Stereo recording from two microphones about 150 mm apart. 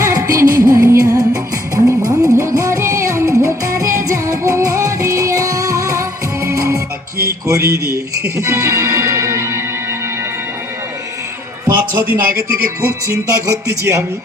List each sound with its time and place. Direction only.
0.0 s music: 20° right (ahead or behind)
7.4 s mantra: 20° right (ahead or behind)
8.4 s music: 20° right (ahead or behind)
12.8 s music: 15° right (ahead or behind)